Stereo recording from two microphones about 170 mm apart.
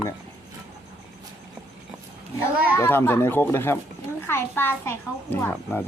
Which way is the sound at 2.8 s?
15° left (ahead or behind).